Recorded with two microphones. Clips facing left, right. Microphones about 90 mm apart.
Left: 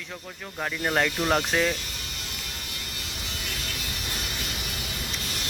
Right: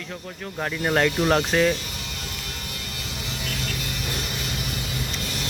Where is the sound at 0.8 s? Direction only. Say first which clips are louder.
Right 4 dB; 5° right (ahead or behind).